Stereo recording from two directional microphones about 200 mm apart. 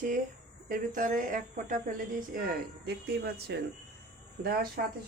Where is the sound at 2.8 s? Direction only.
55° right (ahead or behind).